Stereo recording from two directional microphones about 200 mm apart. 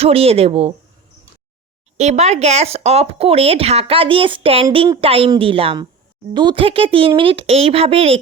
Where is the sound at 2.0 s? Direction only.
35° right (ahead or behind).